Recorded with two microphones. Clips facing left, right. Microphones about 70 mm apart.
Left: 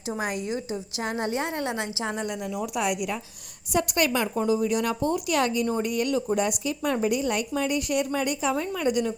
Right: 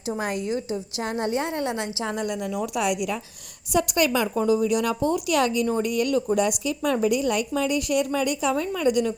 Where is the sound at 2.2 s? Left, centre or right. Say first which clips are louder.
Right 3 dB; right.